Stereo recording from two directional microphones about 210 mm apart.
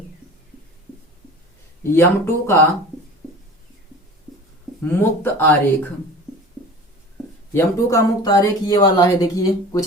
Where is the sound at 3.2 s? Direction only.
5° left (ahead or behind).